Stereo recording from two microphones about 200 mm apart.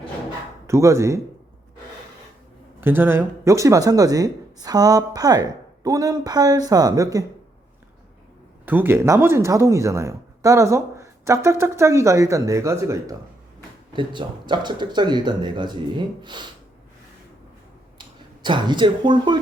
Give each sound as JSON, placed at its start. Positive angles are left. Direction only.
{"t": 0.7, "sound": "speech", "side_deg": -15}
{"t": 2.8, "sound": "speech", "side_deg": -10}
{"t": 8.6, "sound": "speech", "side_deg": -10}
{"t": 18.4, "sound": "speech", "side_deg": -25}